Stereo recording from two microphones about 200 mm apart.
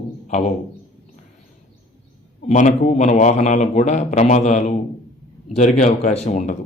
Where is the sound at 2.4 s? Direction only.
40° left (ahead or behind).